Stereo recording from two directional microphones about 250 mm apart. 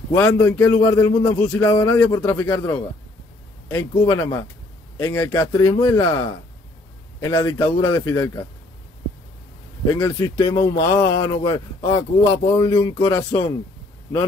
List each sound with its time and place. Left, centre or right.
0.1 s speech: centre
3.9 s speech: centre
7.2 s speech: centre
9.9 s speech: centre